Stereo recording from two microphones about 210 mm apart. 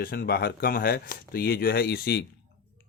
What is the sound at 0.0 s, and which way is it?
Speech, 45° left (ahead or behind).